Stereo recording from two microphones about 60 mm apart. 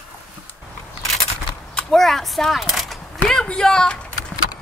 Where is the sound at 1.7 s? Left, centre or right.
Centre.